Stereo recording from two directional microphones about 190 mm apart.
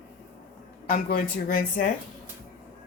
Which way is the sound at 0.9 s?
50° left (ahead or behind).